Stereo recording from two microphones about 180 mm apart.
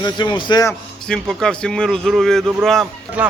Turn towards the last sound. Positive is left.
turn(degrees=0)  # may be behind; listen again after turning